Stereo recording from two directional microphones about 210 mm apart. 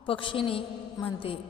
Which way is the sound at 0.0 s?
25° left (ahead or behind).